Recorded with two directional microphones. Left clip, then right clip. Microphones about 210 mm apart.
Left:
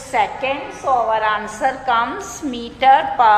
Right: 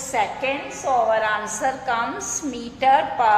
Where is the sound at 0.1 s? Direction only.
Centre (ahead or behind).